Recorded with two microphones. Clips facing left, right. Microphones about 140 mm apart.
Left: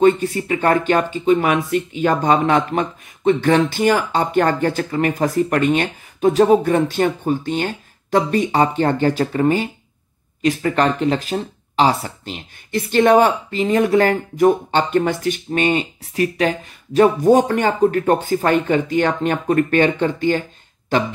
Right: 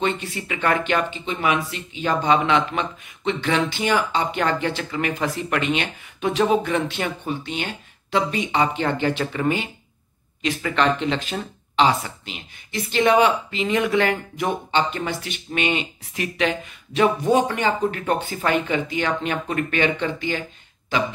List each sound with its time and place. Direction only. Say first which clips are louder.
0.0 s speech: left 10 dB; 40° left (ahead or behind)